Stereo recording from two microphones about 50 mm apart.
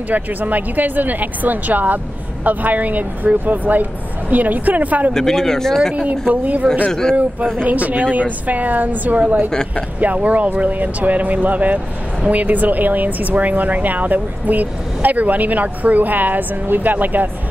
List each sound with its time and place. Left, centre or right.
0.1 s speech: right
5.1 s speech: centre
6.2 s speech: right
6.9 s speech: centre
7.6 s speech: right
9.5 s speech: centre
9.9 s speech: right